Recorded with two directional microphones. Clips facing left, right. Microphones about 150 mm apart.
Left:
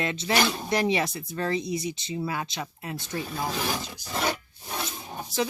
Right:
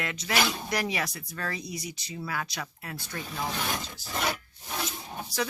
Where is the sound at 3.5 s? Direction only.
Centre (ahead or behind).